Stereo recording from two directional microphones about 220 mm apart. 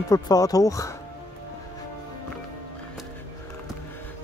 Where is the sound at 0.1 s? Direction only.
15° left (ahead or behind).